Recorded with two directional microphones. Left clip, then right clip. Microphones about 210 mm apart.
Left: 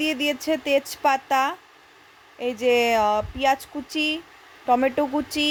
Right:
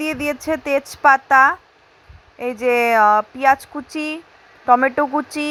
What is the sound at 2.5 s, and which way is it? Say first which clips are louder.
Speech: right 5 dB; 15° right (ahead or behind).